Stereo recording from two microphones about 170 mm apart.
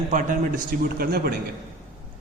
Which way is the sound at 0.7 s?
60° right (ahead or behind).